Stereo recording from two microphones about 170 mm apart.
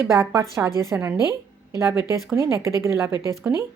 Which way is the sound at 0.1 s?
15° right (ahead or behind).